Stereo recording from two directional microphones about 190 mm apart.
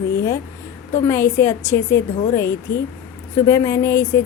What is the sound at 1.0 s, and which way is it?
A woman's voice, 15° left (ahead or behind).